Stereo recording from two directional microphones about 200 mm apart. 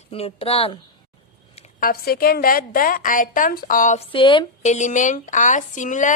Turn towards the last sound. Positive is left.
turn(degrees=40)  # may be behind; listen again after turning